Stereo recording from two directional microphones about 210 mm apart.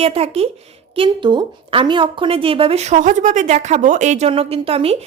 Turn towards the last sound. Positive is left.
turn(degrees=-30)  # may be behind; listen again after turning